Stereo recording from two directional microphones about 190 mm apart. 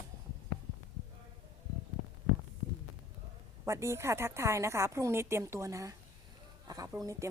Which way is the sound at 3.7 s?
15° right (ahead or behind).